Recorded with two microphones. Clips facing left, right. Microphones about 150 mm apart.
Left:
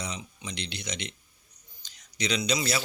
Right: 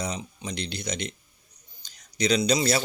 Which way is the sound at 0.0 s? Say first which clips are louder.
Right 5 dB; 40° right (ahead or behind).